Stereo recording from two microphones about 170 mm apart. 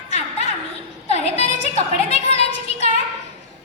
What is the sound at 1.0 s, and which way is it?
A woman's voice, 40° left (ahead or behind).